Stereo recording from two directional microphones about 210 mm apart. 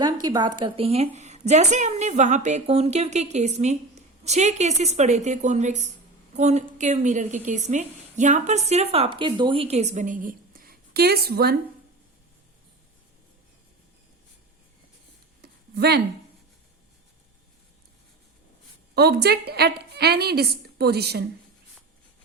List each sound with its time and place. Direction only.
0.0 s a woman's voice: 20° right (ahead or behind); by 11.5 s 50° right (ahead or behind)
15.4 s a sound: 50° right (ahead or behind)
18.9 s a woman's voice: 50° right (ahead or behind)